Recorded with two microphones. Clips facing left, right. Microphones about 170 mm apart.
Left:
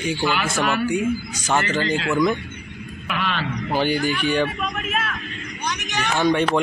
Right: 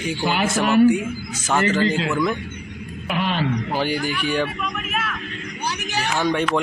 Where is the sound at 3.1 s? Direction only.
40° right (ahead or behind).